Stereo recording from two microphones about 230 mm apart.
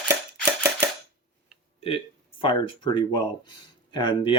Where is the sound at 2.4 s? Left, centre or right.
Left.